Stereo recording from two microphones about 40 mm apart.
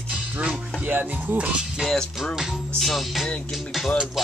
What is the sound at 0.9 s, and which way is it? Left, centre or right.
Speech, right.